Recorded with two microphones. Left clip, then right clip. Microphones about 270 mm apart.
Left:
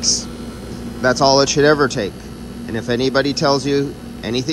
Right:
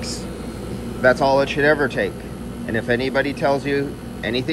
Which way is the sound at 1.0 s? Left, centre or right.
Centre.